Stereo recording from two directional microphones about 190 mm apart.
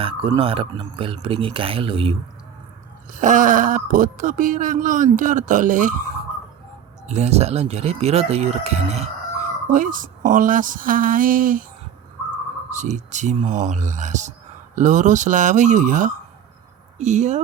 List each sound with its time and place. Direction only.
0.0 s speech: 30° right (ahead or behind)
3.1 s speech: 40° right (ahead or behind)
7.1 s speech: 35° right (ahead or behind)
9.7 s speech: 45° right (ahead or behind)
12.7 s speech: 40° right (ahead or behind)